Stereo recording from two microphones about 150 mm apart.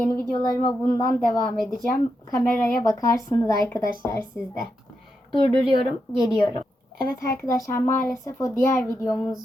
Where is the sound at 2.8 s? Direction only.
25° left (ahead or behind).